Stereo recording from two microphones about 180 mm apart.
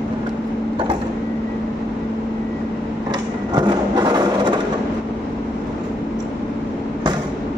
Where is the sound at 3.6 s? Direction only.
25° right (ahead or behind).